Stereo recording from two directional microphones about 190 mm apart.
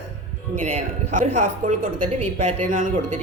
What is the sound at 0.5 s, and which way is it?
A woman's voice, 40° right (ahead or behind).